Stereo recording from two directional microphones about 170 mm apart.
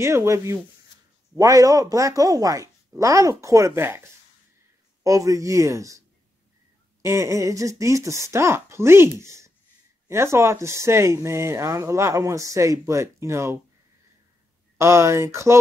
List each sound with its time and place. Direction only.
0.0 s speech: 15° right (ahead or behind)
7.1 s speech: 20° right (ahead or behind)
9.2 s a sound: 15° right (ahead or behind)
10.0 s speech: 15° right (ahead or behind)
14.8 s speech: 15° right (ahead or behind)